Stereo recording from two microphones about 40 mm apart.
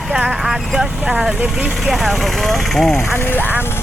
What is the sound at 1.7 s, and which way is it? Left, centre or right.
Speech, centre.